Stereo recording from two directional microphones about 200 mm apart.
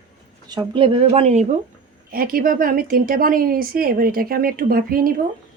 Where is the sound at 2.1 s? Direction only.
45° right (ahead or behind).